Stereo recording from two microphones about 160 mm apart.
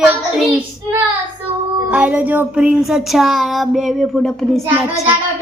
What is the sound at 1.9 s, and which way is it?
A woman's voice, 5° right (ahead or behind).